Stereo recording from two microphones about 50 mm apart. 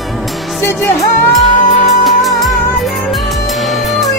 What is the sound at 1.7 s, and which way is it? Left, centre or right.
Music, centre.